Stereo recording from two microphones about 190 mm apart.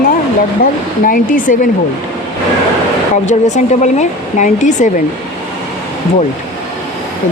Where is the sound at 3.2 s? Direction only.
40° left (ahead or behind).